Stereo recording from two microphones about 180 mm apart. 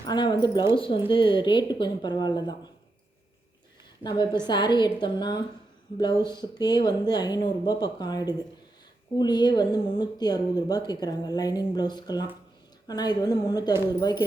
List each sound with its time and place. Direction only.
0.0 s speech: 25° left (ahead or behind)
4.0 s speech: 25° left (ahead or behind)